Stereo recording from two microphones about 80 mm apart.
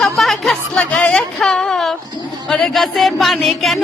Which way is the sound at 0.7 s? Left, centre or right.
Centre.